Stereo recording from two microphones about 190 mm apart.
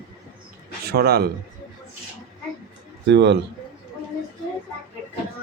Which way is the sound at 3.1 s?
65° right (ahead or behind).